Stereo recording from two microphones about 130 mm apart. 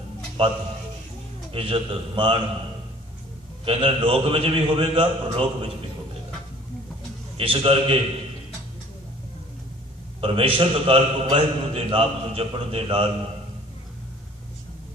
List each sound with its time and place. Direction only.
0.4 s a man's voice: 40° right (ahead or behind)
3.6 s a man's voice: 45° right (ahead or behind)
7.3 s a man's voice: 45° right (ahead or behind)
10.2 s a man's voice: 45° right (ahead or behind)